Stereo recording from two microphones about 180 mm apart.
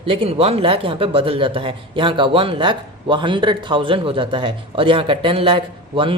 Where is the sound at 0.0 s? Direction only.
30° right (ahead or behind).